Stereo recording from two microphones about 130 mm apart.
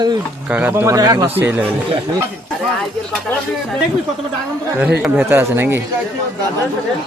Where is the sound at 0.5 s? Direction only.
15° right (ahead or behind).